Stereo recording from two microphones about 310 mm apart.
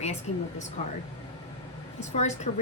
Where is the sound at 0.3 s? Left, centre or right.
Left.